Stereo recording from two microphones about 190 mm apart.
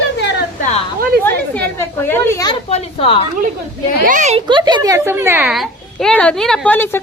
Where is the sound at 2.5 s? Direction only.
35° left (ahead or behind).